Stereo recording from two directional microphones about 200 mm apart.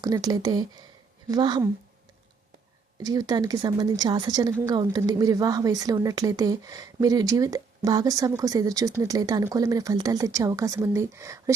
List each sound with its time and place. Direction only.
0.0 s a woman's voice: 20° right (ahead or behind)
3.0 s a woman's voice: 20° right (ahead or behind)